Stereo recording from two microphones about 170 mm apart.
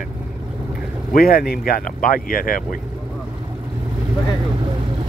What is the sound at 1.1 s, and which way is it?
Speech, 60° left (ahead or behind).